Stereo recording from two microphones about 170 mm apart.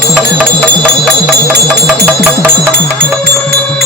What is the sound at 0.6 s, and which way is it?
Music, 5° left (ahead or behind).